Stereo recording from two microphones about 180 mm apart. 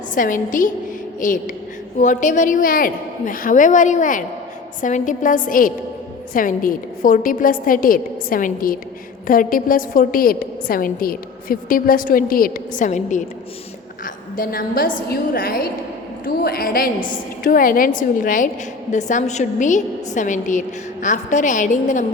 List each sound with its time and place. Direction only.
0.1 s a woman's voice: 45° left (ahead or behind)